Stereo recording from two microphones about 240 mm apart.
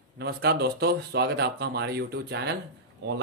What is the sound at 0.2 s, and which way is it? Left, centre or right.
Speech, right.